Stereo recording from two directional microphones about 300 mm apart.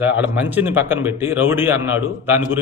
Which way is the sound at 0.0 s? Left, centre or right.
Centre.